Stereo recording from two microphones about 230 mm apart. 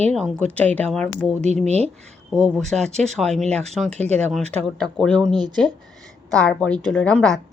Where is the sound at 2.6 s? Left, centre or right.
Centre.